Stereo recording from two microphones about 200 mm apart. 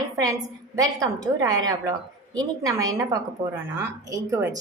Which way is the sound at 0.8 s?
20° right (ahead or behind).